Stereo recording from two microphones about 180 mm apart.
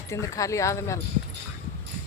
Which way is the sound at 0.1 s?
15° left (ahead or behind).